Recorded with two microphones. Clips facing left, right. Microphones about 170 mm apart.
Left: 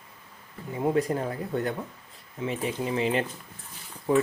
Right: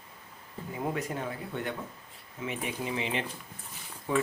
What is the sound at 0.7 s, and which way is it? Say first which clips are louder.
Speech: left 8 dB; 30° left (ahead or behind).